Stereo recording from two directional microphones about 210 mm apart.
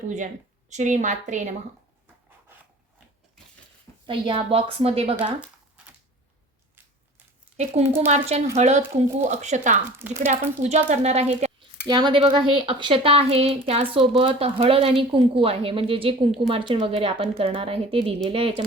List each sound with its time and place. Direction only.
0.7 s a woman's voice: 35° right (ahead or behind)
4.0 s a woman's voice: 25° right (ahead or behind)
5.4 s a sound: 5° right (ahead or behind)
7.5 s a woman's voice: 30° right (ahead or behind)
11.9 s a woman's voice: 20° right (ahead or behind)